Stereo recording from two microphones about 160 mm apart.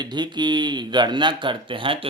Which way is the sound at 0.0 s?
25° right (ahead or behind).